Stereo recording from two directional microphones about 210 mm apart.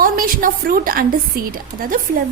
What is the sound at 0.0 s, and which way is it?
A woman's voice, 45° right (ahead or behind).